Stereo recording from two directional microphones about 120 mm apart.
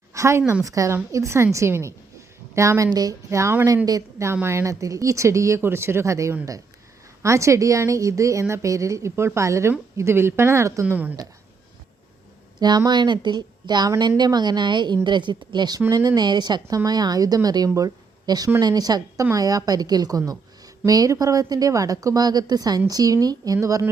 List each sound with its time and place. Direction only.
0.1 s a woman's voice: 25° right (ahead or behind)
12.5 s a woman's voice: 35° right (ahead or behind)